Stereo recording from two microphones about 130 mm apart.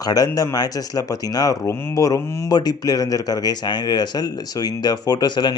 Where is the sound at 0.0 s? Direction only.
30° left (ahead or behind).